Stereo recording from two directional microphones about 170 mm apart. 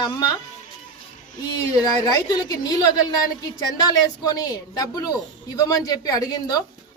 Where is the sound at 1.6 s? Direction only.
20° left (ahead or behind).